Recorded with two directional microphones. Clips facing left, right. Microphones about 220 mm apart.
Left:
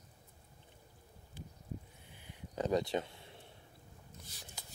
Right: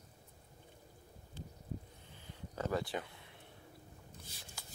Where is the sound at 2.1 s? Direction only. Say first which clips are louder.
Left 3 dB; 15° left (ahead or behind).